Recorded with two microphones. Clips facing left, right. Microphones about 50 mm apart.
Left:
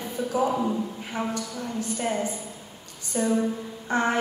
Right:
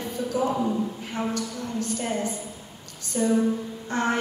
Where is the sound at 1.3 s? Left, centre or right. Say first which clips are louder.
Right 1 dB; centre.